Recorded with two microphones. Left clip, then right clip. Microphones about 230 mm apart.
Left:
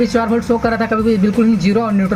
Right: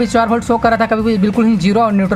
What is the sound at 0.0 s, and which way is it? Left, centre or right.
Speech, right.